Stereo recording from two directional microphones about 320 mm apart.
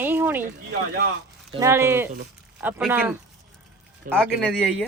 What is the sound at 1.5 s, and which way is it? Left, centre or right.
Speech, centre.